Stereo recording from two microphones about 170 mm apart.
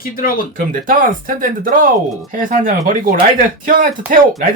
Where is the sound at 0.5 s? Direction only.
55° right (ahead or behind).